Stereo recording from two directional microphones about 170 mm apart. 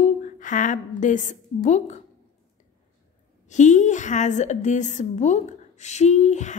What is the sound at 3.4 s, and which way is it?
A woman's voice, 45° left (ahead or behind).